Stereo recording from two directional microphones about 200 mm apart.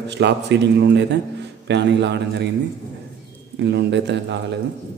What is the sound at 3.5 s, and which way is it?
Speech, 60° right (ahead or behind).